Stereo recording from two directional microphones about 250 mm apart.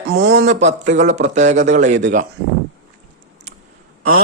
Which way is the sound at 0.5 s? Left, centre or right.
Right.